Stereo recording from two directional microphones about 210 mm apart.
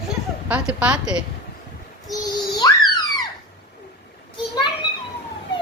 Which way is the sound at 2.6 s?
20° left (ahead or behind).